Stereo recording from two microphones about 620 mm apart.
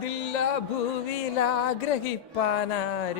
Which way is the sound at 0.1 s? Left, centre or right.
Left.